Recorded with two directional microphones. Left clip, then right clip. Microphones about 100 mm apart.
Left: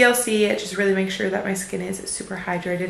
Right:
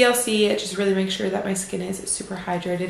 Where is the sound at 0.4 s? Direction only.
15° right (ahead or behind).